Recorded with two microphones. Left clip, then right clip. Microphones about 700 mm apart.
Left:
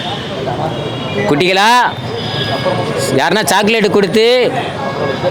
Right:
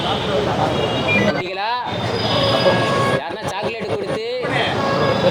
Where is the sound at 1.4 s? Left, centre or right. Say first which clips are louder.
Left 13 dB; left.